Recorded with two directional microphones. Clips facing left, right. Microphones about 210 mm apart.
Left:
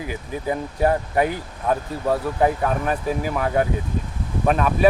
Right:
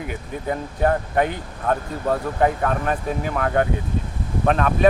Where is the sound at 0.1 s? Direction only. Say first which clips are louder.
Left 2 dB; 10° left (ahead or behind).